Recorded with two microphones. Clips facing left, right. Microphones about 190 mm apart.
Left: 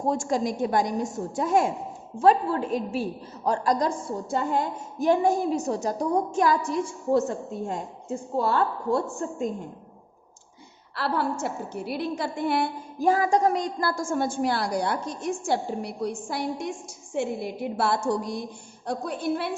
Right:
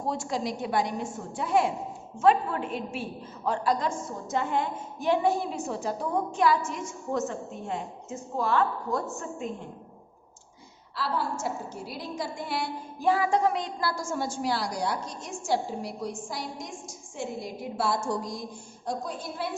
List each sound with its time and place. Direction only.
0.0 s a woman's voice: 45° left (ahead or behind)
6.7 s a woman's voice: 35° left (ahead or behind)
10.9 s a woman's voice: 60° left (ahead or behind)